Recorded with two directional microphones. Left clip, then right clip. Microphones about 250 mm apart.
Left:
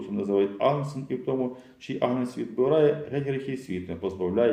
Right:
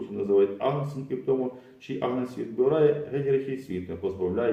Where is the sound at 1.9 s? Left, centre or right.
Left.